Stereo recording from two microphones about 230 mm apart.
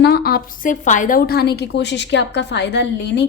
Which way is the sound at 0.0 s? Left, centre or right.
Left.